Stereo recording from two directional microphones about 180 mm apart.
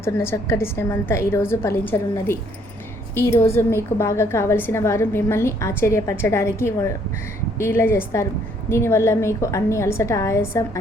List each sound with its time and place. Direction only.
0.0 s a woman's voice: 15° left (ahead or behind)